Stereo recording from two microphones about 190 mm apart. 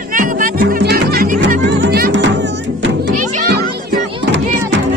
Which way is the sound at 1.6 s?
60° right (ahead or behind).